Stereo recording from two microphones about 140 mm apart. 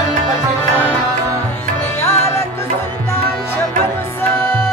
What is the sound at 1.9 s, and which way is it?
Music, 15° left (ahead or behind).